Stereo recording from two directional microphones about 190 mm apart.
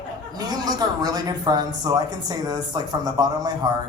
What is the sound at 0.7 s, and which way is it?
A man's voice, 20° right (ahead or behind).